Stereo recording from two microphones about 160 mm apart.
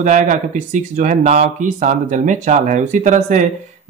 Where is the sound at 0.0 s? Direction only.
50° right (ahead or behind).